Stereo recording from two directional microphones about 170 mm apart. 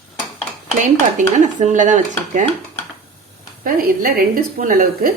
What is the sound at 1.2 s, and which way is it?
Speech, 45° right (ahead or behind).